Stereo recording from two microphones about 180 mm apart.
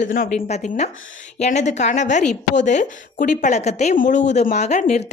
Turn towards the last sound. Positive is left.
turn(degrees=40)  # may be behind; listen again after turning